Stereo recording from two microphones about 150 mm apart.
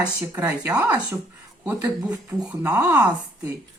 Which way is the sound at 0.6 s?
20° right (ahead or behind).